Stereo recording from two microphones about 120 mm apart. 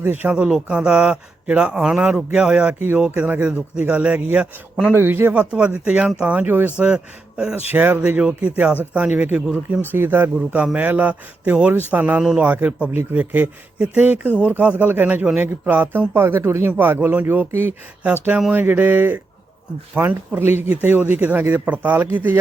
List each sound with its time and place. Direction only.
0.0 s a man's voice: 15° right (ahead or behind)
2.7 s a man's voice: 15° right (ahead or behind)